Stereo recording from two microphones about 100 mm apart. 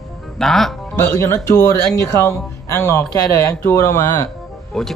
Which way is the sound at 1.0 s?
30° left (ahead or behind).